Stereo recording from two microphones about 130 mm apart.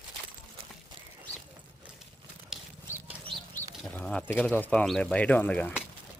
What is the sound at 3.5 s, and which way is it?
Speech, 10° left (ahead or behind).